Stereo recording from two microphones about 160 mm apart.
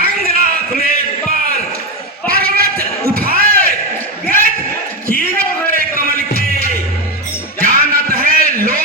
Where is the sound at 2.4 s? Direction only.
70° right (ahead or behind).